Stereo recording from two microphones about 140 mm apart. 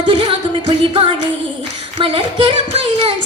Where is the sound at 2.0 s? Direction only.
40° right (ahead or behind).